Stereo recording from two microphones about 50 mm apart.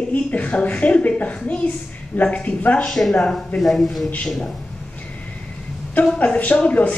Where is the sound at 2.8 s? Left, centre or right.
Centre.